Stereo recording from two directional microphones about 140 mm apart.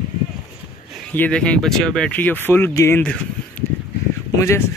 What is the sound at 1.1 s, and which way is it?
Speech, 10° left (ahead or behind).